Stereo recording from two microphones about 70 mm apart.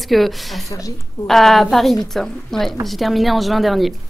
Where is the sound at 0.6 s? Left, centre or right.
Left.